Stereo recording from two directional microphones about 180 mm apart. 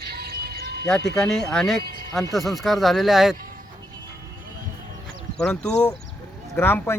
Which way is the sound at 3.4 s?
50° right (ahead or behind).